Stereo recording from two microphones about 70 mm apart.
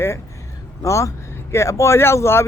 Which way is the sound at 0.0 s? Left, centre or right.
Left.